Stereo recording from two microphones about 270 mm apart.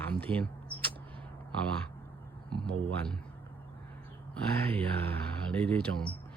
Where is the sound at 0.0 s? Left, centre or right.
Centre.